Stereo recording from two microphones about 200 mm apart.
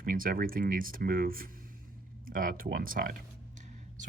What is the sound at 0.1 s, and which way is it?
Speech, 45° right (ahead or behind).